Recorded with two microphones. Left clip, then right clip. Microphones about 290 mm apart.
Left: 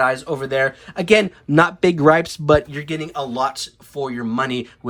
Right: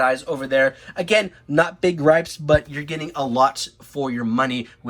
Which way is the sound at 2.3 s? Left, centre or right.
Centre.